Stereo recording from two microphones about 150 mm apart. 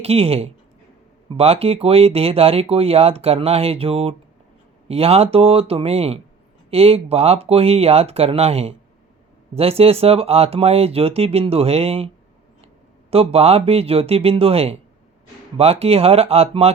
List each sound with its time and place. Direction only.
0.0 s speech: 45° right (ahead or behind)